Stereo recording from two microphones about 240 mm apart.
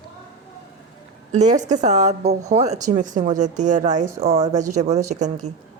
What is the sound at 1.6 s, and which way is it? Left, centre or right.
A woman's voice, right.